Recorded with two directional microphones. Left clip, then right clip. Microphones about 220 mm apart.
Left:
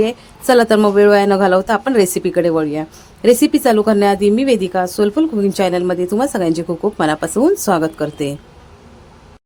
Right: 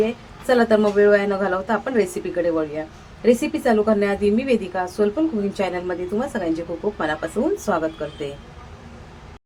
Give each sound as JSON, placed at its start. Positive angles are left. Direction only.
{"t": 0.0, "sound": "a woman's voice", "side_deg": 50}